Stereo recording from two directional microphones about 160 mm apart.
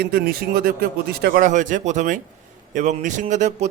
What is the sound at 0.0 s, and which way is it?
A man's voice, 75° right (ahead or behind).